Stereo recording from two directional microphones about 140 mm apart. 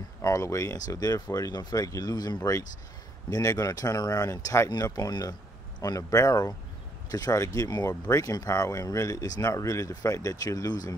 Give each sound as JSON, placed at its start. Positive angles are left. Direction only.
{"t": 0.2, "sound": "speech", "side_deg": 20}